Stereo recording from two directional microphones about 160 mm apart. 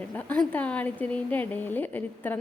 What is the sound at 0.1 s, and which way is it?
A woman's voice, 10° left (ahead or behind).